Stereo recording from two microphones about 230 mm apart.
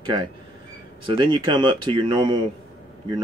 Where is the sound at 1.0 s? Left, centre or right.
Right.